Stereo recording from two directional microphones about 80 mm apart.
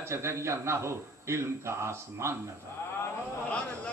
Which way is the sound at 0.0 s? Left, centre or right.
Right.